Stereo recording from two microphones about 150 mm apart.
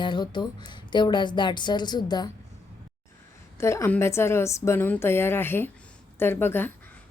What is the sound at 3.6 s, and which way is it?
A woman's voice, 20° left (ahead or behind).